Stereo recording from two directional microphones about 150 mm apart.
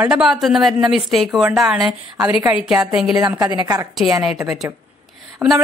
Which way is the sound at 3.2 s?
25° right (ahead or behind).